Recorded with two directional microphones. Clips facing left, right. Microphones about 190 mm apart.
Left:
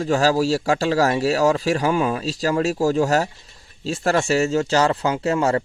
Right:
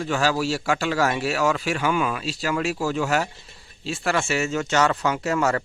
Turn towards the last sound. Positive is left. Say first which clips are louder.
# left 3 dB
turn(degrees=30)  # may be behind; listen again after turning